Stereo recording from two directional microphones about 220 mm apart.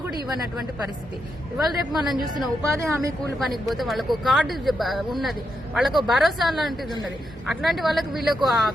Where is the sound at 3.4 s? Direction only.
Centre (ahead or behind).